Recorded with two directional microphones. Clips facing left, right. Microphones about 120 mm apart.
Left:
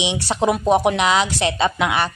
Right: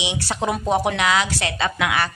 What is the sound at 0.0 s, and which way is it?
A woman's voice, 20° left (ahead or behind).